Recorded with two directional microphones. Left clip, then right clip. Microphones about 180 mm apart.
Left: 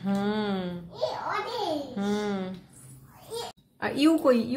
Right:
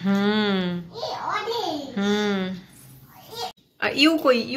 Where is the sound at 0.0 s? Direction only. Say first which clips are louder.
Right 6 dB; 5° right (ahead or behind).